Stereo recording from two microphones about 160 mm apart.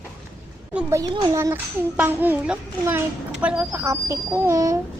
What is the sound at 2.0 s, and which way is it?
A child's voice, 10° right (ahead or behind).